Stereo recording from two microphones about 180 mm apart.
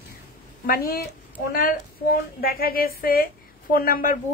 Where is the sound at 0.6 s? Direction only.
55° left (ahead or behind).